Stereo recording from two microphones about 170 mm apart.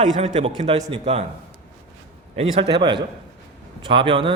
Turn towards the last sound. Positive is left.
turn(degrees=-30)  # may be behind; listen again after turning